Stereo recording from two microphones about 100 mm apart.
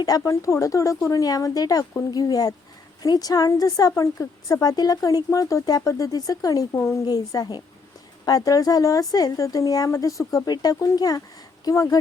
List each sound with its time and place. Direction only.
0.2 s a woman's voice: 30° left (ahead or behind)
6.7 s a woman's voice: 25° left (ahead or behind)
7.0 s a woman's voice: 40° left (ahead or behind)